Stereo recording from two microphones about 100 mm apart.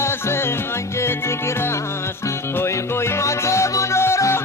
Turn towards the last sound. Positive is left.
turn(degrees=30)  # may be behind; listen again after turning